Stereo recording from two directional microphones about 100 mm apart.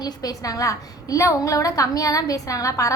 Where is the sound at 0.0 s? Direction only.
35° left (ahead or behind).